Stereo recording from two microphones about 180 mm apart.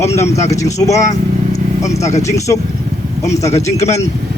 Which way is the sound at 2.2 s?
15° left (ahead or behind).